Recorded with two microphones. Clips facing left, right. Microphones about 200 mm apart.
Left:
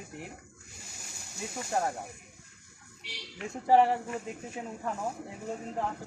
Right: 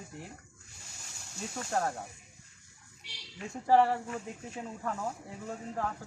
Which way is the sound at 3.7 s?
20° left (ahead or behind).